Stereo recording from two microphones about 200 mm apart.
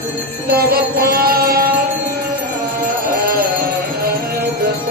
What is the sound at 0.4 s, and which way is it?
Music, 50° right (ahead or behind).